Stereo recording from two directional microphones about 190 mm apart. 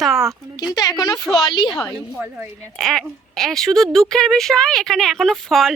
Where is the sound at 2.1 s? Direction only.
10° right (ahead or behind).